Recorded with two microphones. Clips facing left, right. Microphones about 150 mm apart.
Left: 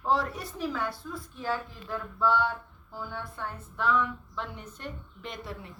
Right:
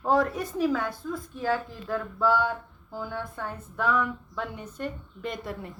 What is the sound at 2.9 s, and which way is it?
Speech, 45° right (ahead or behind).